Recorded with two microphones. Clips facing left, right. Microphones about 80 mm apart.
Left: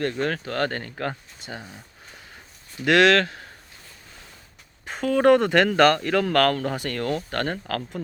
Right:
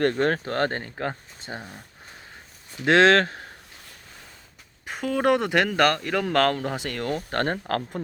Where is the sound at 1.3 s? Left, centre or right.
Right.